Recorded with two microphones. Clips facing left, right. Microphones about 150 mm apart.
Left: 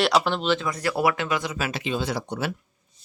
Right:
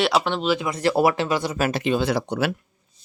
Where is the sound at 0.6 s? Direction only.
25° right (ahead or behind).